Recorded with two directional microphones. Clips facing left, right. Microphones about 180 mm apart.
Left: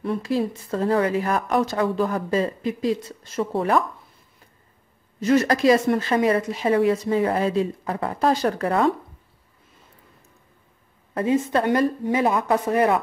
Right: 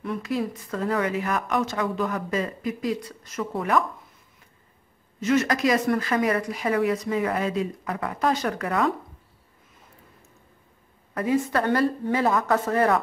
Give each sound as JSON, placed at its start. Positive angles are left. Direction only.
{"t": 0.0, "sound": "speech", "side_deg": 30}
{"t": 5.2, "sound": "speech", "side_deg": 35}
{"t": 11.1, "sound": "a woman's voice", "side_deg": 25}